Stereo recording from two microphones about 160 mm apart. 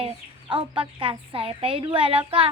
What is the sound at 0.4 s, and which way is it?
Speech, 30° right (ahead or behind).